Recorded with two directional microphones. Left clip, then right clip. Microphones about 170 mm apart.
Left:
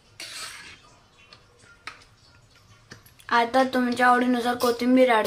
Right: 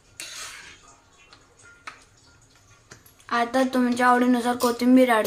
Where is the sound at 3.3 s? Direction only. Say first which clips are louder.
Left 2 dB; 10° left (ahead or behind).